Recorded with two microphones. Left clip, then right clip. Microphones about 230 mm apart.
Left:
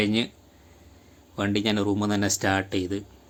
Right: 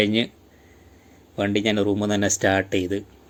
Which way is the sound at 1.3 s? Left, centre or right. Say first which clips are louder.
Right 4 dB; centre.